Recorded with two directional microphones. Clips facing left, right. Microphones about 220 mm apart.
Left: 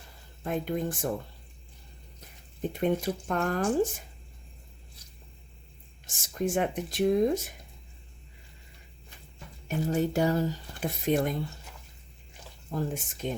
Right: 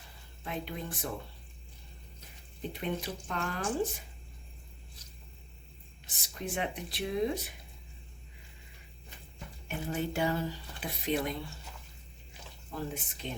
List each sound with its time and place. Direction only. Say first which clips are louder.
0.4 s speech: left 8 dB; 45° left (ahead or behind)
2.7 s speech: left 9 dB; 45° left (ahead or behind)
6.1 s speech: left 9 dB; 45° left (ahead or behind)
9.6 s speech: left 7 dB; 40° left (ahead or behind)
12.7 s speech: left 6 dB; 45° left (ahead or behind)